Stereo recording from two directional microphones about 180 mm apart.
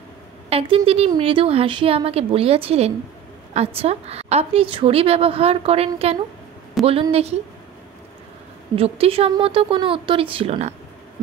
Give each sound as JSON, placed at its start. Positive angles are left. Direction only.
{"t": 0.5, "sound": "speech", "side_deg": -30}
{"t": 6.9, "sound": "speech", "side_deg": -30}
{"t": 8.7, "sound": "speech", "side_deg": -35}